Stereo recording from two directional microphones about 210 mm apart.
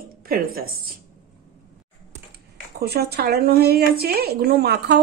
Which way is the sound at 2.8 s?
50° right (ahead or behind).